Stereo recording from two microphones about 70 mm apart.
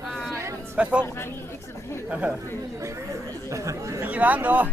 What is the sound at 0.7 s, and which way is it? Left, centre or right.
Speech, centre.